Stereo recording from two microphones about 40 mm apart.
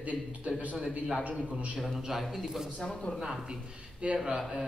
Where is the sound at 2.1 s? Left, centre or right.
Centre.